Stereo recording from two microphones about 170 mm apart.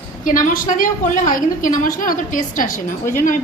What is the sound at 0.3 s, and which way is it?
A woman's voice, 50° left (ahead or behind).